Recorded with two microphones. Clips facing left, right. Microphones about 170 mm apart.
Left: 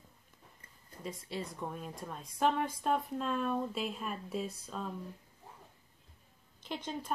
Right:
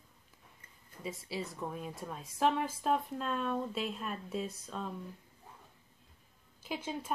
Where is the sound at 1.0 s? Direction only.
5° right (ahead or behind).